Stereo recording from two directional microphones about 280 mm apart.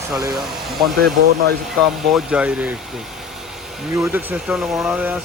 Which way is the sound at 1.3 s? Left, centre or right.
Right.